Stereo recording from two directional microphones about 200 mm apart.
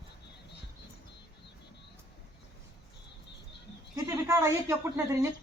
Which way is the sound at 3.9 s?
15° right (ahead or behind).